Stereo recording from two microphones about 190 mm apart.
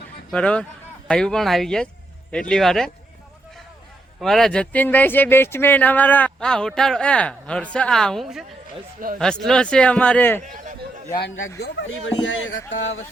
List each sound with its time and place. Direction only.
0.3 s speech: 5° left (ahead or behind)
4.2 s speech: centre (ahead or behind)
10.4 s speech: 40° right (ahead or behind)
11.2 s speech: 90° left
11.6 s speech: 80° left